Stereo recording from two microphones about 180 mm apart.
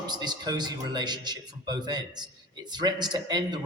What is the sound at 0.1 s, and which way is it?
A man's voice, 25° right (ahead or behind).